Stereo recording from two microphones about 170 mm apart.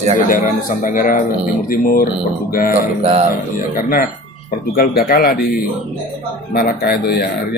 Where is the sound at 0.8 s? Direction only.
50° left (ahead or behind).